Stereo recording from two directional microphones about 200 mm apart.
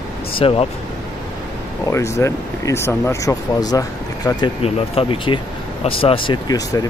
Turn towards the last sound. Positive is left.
turn(degrees=20)  # may be behind; listen again after turning